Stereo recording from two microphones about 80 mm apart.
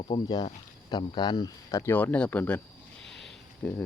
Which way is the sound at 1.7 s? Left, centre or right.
Left.